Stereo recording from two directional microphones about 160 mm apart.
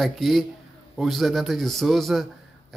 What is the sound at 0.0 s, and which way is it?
Speech, centre (ahead or behind).